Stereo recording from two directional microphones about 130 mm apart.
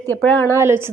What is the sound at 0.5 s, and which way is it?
Speech, 20° right (ahead or behind).